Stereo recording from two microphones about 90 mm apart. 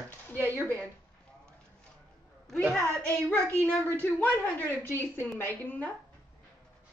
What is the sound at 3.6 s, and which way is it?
A woman's voice, 15° left (ahead or behind).